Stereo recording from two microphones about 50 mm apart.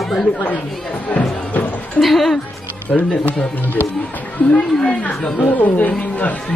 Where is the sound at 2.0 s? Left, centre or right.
Centre.